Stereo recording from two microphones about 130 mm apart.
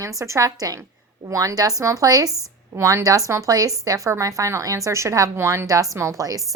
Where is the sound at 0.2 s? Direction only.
25° right (ahead or behind).